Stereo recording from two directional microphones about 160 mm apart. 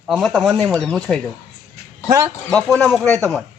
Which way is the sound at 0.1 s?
Centre (ahead or behind).